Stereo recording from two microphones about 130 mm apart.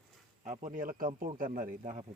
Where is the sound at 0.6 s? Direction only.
90° right; by 2.1 s 70° right (ahead or behind).